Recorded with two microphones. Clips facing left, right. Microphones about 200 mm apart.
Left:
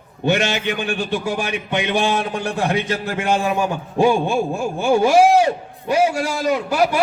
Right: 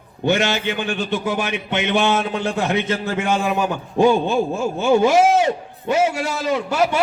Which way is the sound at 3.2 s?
15° left (ahead or behind).